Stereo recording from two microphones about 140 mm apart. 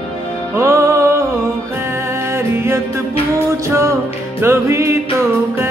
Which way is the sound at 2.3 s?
15° right (ahead or behind).